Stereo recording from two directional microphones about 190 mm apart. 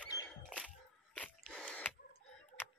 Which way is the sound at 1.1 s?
5° left (ahead or behind).